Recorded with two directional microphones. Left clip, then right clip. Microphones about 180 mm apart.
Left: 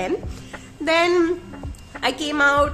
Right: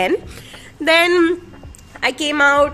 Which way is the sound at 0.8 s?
25° right (ahead or behind).